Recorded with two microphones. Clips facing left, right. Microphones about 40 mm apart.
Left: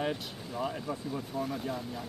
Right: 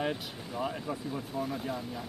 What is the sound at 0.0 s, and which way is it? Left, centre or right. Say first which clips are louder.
Speech: even; centre.